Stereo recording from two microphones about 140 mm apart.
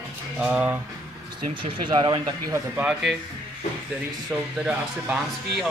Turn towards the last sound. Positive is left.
turn(degrees=-5)  # may be behind; listen again after turning